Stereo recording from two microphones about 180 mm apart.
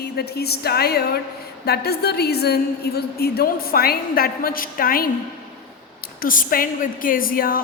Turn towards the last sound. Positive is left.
turn(degrees=55)  # may be behind; listen again after turning